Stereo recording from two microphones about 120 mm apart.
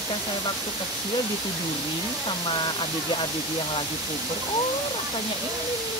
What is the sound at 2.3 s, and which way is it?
Speech, 45° left (ahead or behind).